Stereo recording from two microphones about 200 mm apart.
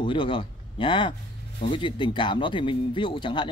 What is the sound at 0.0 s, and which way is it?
A man's voice, 25° left (ahead or behind).